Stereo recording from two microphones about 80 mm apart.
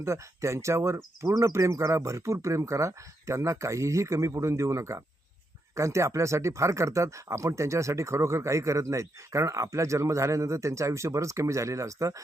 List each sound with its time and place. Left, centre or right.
0.0 s speech: right